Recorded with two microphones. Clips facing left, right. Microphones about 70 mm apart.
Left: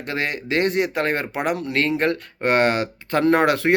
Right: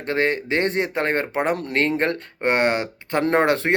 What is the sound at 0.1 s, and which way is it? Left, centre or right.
Speech, right.